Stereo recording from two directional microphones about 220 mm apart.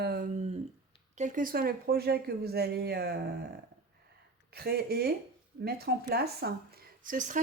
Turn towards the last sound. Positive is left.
turn(degrees=-35)  # may be behind; listen again after turning